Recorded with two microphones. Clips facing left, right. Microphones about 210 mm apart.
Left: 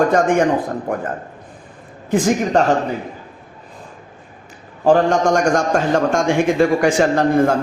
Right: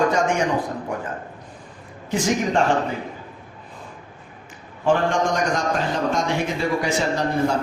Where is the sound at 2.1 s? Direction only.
45° left (ahead or behind).